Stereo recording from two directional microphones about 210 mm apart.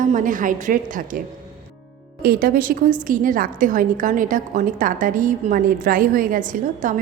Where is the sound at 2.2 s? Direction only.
45° right (ahead or behind).